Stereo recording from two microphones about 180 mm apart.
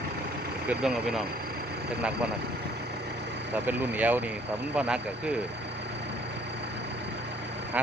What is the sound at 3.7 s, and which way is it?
Speech, 10° right (ahead or behind).